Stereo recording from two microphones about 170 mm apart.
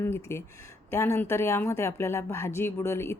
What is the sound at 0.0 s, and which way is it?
Speech, 15° left (ahead or behind).